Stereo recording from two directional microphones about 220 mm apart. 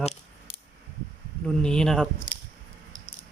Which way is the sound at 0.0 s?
30° left (ahead or behind).